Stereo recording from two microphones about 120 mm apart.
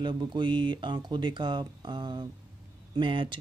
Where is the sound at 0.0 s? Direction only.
40° right (ahead or behind).